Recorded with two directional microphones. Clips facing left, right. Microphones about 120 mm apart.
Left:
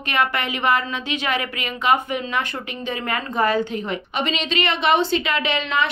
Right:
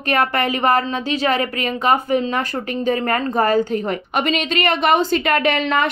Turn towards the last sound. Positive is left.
turn(degrees=-45)  # may be behind; listen again after turning